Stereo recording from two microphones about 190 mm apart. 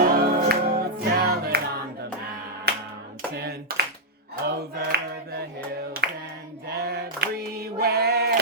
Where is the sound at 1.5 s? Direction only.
55° right (ahead or behind).